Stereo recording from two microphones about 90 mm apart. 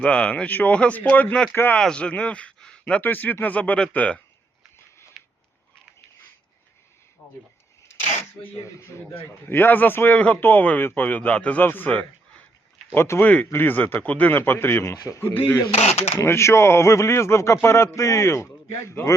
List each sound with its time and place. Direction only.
0.0 s a man's voice: 10° left (ahead or behind)
1.8 s speech: 10° left (ahead or behind)
7.2 s a sound: 10° left (ahead or behind)
8.4 s a man's voice: 30° left (ahead or behind)
14.8 s a man's voice: 35° left (ahead or behind)
15.3 s a man's voice: 20° left (ahead or behind)